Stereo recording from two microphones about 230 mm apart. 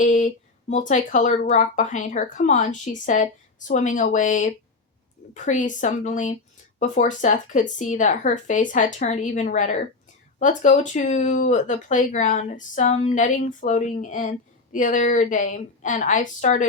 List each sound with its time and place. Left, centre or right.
0.0 s speech: left